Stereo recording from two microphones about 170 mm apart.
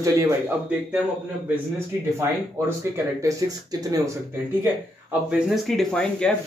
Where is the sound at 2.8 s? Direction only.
20° right (ahead or behind).